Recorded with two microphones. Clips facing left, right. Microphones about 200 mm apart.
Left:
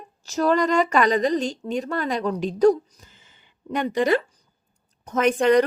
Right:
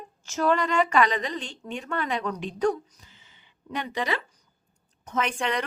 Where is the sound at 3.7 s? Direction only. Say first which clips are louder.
Left 9 dB; 45° left (ahead or behind).